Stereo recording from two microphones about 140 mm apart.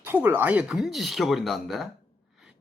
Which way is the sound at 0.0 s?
15° right (ahead or behind).